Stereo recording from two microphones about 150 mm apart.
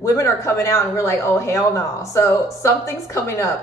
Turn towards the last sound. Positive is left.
turn(degrees=20)  # may be behind; listen again after turning